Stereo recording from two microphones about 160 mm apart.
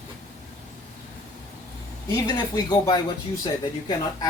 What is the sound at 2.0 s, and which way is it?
Speech, 25° left (ahead or behind).